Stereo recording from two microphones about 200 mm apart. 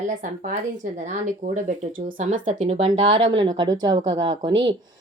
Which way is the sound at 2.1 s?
40° right (ahead or behind).